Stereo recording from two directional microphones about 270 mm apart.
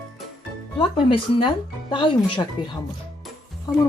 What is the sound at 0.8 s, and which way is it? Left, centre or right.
Speech, centre.